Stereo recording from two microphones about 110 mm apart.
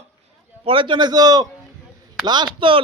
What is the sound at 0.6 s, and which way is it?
Speech, 50° right (ahead or behind).